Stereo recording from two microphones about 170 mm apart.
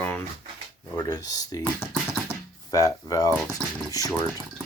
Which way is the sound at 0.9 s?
25° left (ahead or behind).